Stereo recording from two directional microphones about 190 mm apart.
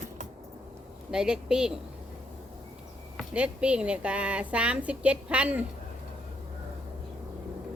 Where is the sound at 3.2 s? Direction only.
5° right (ahead or behind).